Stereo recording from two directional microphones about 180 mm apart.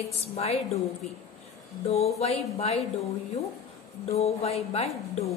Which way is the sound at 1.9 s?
35° left (ahead or behind).